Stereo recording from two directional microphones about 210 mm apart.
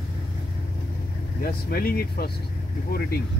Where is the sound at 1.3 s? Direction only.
45° left (ahead or behind).